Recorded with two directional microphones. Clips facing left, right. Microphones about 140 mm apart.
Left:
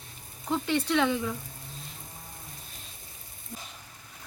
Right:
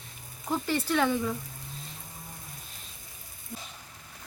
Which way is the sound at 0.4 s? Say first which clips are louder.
Left 1 dB; 5° right (ahead or behind).